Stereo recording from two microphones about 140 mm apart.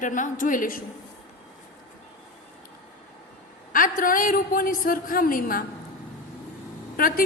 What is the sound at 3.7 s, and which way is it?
A woman's voice, 85° left.